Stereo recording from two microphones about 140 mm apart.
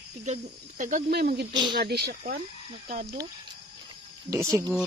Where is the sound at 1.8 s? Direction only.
90° right.